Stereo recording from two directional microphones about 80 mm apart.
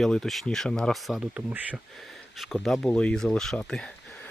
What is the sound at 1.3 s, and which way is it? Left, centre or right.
Speech, centre.